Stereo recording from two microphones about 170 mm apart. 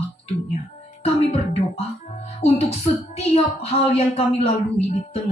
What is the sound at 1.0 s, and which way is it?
Speech, 40° left (ahead or behind).